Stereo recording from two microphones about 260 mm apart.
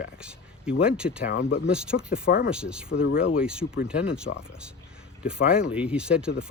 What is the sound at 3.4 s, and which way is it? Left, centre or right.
Speech, centre.